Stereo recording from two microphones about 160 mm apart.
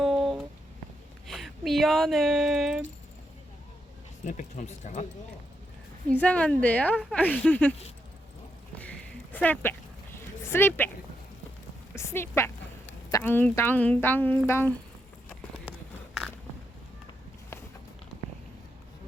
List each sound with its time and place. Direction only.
0.0 s music: centre (ahead or behind)
1.3 s speech: centre (ahead or behind)
4.3 s speech: 50° left (ahead or behind)
6.1 s speech: 10° left (ahead or behind)
8.7 s a sound: 10° left (ahead or behind)
11.9 s speech: 15° left (ahead or behind)